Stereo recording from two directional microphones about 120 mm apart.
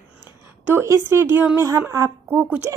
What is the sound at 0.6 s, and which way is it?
A woman's voice, 20° right (ahead or behind).